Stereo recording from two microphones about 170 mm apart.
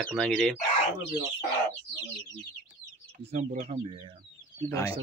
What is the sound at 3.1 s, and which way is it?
Speech, 45° right (ahead or behind).